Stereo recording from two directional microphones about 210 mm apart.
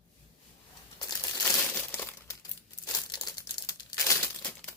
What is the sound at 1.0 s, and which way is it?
Crumpling, 20° left (ahead or behind).